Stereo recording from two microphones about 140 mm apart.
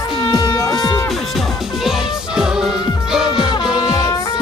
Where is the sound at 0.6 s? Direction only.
30° left (ahead or behind).